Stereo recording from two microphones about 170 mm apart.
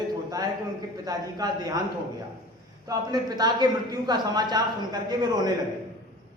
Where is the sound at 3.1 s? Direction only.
25° right (ahead or behind).